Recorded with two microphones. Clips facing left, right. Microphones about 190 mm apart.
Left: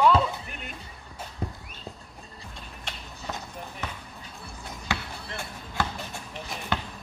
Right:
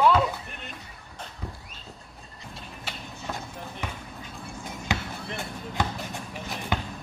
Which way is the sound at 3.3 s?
5° right (ahead or behind).